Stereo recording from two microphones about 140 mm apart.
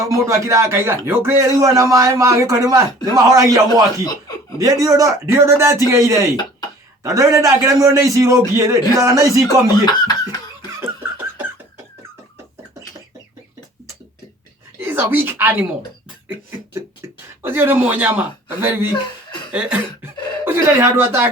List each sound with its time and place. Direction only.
0.0 s speech: 20° right (ahead or behind)
4.0 s chuckle: 25° left (ahead or behind)
4.6 s speech: 25° right (ahead or behind)
9.8 s cough: 30° left (ahead or behind)
14.8 s speech: 15° right (ahead or behind)
17.4 s speech: 15° right (ahead or behind)